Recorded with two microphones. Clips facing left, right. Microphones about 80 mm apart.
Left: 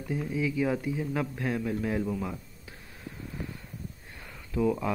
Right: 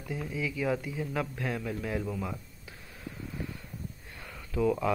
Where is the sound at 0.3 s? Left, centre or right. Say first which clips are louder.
Left 2 dB; left.